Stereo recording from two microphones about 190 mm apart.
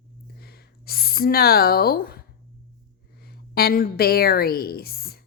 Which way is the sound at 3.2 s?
55° left (ahead or behind).